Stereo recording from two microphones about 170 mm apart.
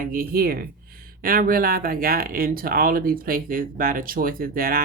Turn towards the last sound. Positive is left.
turn(degrees=-60)  # may be behind; listen again after turning